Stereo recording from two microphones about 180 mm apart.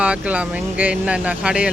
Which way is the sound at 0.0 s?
5° right (ahead or behind).